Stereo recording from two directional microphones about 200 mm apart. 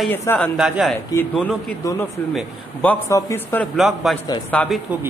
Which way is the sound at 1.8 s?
15° left (ahead or behind).